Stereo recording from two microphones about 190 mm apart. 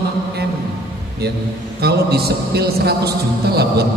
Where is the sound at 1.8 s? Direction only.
55° right (ahead or behind).